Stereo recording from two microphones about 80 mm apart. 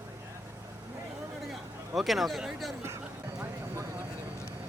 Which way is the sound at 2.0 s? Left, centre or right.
Centre.